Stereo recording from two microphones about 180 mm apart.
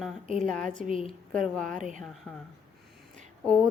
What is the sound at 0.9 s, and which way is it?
Speech, 35° left (ahead or behind).